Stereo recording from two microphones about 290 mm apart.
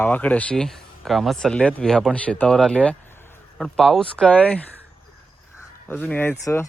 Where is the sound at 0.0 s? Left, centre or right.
Centre.